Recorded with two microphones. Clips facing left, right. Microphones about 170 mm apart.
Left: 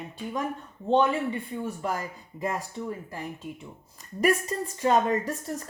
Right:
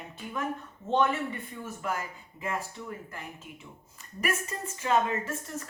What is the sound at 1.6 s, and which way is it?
A woman's voice, 35° left (ahead or behind).